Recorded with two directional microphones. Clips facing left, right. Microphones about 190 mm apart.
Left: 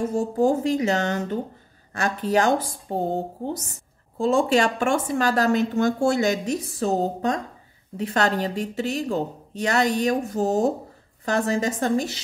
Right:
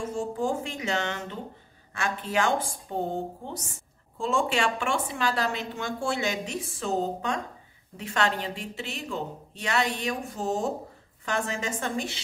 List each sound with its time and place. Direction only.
0.0 s a woman's voice: 40° left (ahead or behind)